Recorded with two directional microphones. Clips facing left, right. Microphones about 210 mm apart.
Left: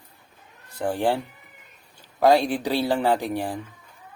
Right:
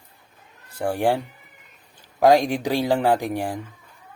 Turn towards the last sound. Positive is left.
turn(degrees=-15)  # may be behind; listen again after turning